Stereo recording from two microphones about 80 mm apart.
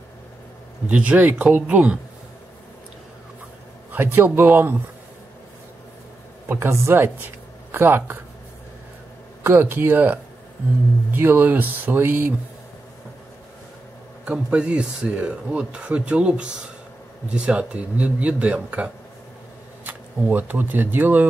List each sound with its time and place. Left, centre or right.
0.8 s speech: centre
3.9 s speech: right
6.5 s speech: right
9.4 s speech: right
14.2 s speech: centre